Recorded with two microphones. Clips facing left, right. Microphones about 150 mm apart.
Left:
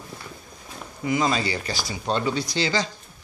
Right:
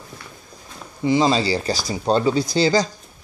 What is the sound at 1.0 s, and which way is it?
Speech, 30° right (ahead or behind).